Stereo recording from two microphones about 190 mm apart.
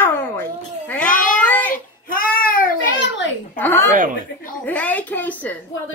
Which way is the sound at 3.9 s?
45° right (ahead or behind).